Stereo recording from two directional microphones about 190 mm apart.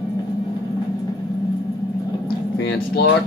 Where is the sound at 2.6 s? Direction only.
60° left (ahead or behind).